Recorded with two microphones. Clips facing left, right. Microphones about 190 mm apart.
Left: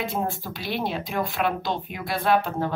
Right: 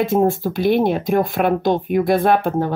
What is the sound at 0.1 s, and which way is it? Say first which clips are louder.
Speech: right 12 dB; 50° right (ahead or behind).